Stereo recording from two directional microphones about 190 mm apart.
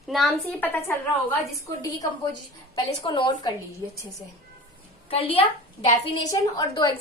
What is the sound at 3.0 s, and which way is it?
Speech, 25° left (ahead or behind).